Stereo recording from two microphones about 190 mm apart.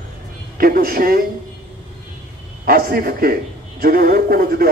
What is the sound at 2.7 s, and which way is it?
A man's voice, 50° right (ahead or behind).